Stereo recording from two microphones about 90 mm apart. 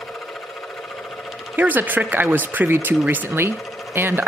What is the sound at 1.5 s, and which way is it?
Speech, 20° right (ahead or behind).